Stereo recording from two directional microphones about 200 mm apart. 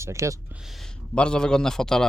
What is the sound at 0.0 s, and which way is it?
Speech, 15° right (ahead or behind).